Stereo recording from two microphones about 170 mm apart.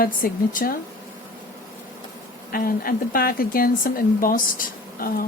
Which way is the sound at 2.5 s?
60° left (ahead or behind).